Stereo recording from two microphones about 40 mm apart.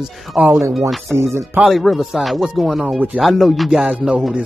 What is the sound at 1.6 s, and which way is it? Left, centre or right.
Speech, centre.